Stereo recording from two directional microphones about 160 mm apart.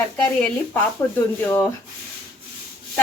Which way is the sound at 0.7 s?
10° left (ahead or behind).